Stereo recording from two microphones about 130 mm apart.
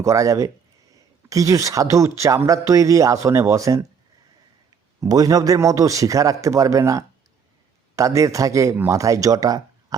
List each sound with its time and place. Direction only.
0.0 s speech: 25° right (ahead or behind)
4.9 s speech: 30° right (ahead or behind)